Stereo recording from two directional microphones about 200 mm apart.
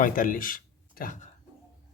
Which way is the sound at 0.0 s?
45° left (ahead or behind).